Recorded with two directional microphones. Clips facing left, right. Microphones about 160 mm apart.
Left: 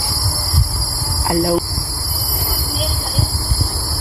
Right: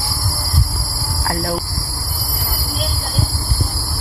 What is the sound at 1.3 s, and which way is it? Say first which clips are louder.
Speech: left 7 dB; 15° left (ahead or behind).